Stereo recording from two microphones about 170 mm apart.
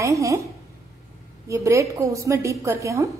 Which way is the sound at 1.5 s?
20° right (ahead or behind).